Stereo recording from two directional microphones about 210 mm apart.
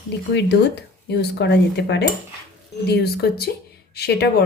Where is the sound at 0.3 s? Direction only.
55° left (ahead or behind).